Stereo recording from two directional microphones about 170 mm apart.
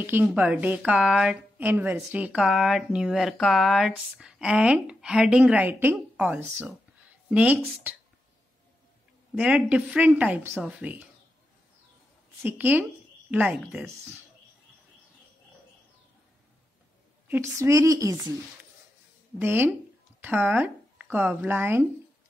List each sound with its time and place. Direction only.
0.0 s a woman's voice: 10° right (ahead or behind)
9.3 s a woman's voice: 5° right (ahead or behind)
12.4 s a woman's voice: 10° right (ahead or behind)
17.3 s a woman's voice: 15° right (ahead or behind)
19.3 s a woman's voice: 10° right (ahead or behind)